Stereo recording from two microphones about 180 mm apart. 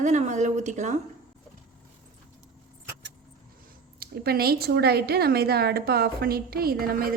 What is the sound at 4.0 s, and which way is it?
A woman's voice, 60° right (ahead or behind).